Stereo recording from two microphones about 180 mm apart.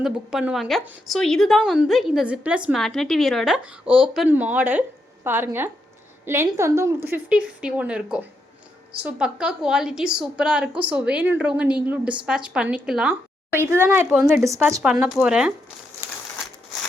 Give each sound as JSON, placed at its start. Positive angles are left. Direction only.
{"t": 0.0, "sound": "a woman's voice", "side_deg": -5}
{"t": 14.4, "sound": "a woman's voice", "side_deg": -15}
{"t": 16.0, "sound": "crumpling", "side_deg": -15}